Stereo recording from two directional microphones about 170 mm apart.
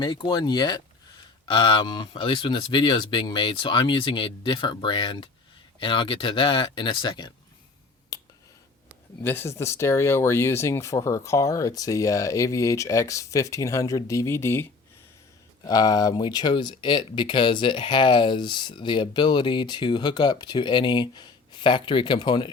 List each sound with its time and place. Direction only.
0.0 s speech: 25° left (ahead or behind)
8.1 s finger snapping: 20° left (ahead or behind)
9.2 s speech: 15° left (ahead or behind)